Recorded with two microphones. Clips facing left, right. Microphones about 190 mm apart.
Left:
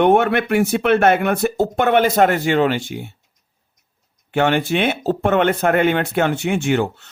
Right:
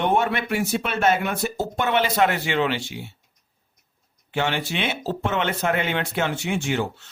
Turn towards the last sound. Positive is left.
turn(degrees=55)  # may be behind; listen again after turning